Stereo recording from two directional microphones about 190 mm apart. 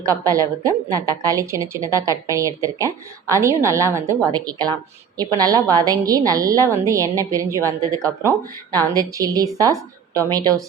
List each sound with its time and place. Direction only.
0.0 s a woman's voice: 15° right (ahead or behind)